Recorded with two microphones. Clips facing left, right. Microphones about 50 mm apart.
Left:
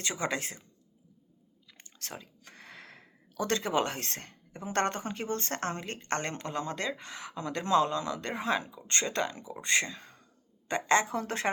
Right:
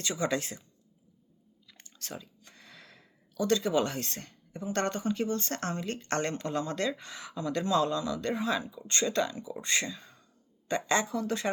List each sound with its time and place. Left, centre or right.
0.0 s speech: left
1.8 s chewing: left
2.4 s a woman's voice: left